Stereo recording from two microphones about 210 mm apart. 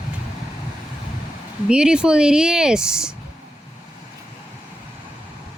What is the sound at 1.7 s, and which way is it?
A woman's voice, 5° right (ahead or behind).